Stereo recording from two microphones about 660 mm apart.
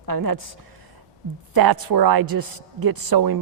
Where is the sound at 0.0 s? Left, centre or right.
Right.